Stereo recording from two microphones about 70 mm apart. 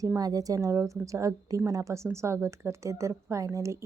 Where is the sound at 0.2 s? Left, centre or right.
Right.